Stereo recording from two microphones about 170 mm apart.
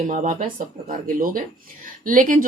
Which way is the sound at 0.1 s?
45° right (ahead or behind).